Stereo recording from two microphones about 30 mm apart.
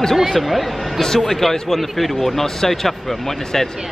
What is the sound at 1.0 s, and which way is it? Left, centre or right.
A man's voice, centre.